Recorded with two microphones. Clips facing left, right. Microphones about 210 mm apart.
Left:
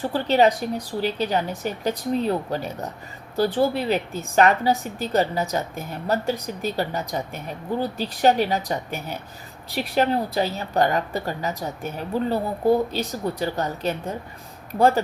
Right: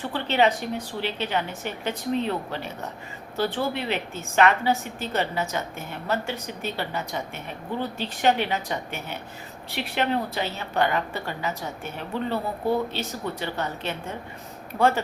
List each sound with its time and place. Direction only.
0.0 s a woman's voice: 40° left (ahead or behind)